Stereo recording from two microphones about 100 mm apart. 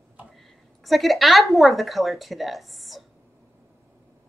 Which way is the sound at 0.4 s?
Centre (ahead or behind).